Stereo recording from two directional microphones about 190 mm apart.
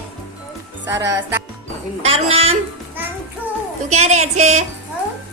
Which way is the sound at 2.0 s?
30° right (ahead or behind).